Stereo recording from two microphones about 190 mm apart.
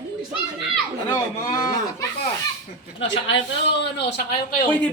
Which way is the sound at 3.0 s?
70° left (ahead or behind).